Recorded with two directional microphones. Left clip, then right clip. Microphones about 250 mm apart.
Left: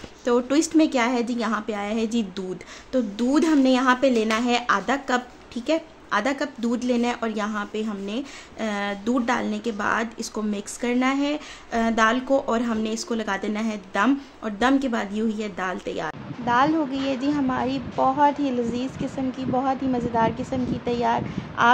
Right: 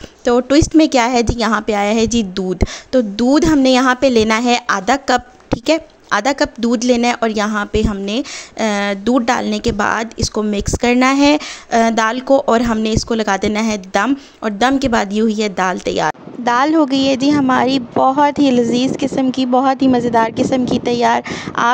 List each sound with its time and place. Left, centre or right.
0.2 s a woman's voice: right